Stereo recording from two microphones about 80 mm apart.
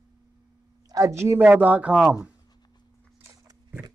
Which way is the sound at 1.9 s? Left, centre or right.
Centre.